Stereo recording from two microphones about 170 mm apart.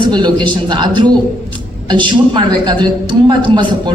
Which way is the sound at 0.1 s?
25° right (ahead or behind).